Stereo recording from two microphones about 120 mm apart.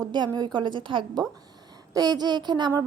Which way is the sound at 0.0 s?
35° right (ahead or behind).